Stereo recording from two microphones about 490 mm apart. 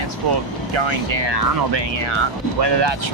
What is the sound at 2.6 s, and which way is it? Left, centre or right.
Speech, right.